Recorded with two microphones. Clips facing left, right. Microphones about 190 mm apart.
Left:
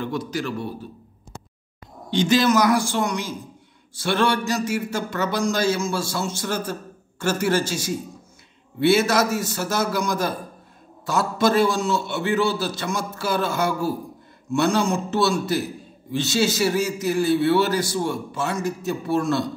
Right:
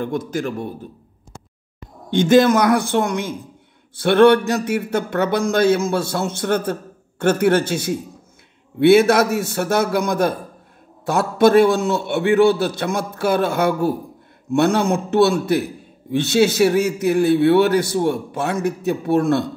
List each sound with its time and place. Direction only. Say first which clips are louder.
0.0 s speech: right 4 dB; 50° right (ahead or behind)
2.0 s a man's voice: right 6 dB; 55° right (ahead or behind)